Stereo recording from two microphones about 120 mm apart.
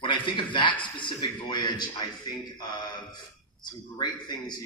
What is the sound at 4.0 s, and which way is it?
Speech, 40° left (ahead or behind).